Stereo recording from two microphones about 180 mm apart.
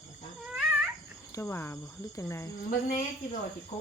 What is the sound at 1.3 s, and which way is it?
Speech, 15° left (ahead or behind).